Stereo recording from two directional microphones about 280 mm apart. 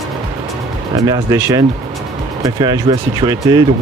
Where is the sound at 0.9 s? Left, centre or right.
Centre.